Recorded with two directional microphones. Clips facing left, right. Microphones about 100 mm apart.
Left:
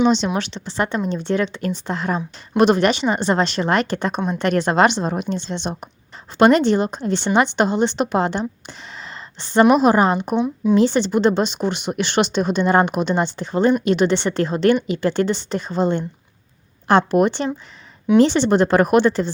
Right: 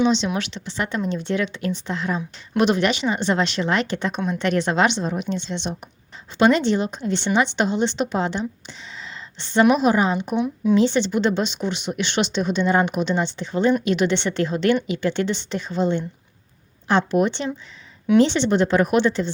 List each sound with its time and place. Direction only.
0.3 s a woman's voice: 35° left (ahead or behind)
10.3 s speech: 20° left (ahead or behind)
10.8 s speech: 40° left (ahead or behind)